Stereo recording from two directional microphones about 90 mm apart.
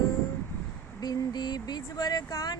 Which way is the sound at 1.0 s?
55° left (ahead or behind).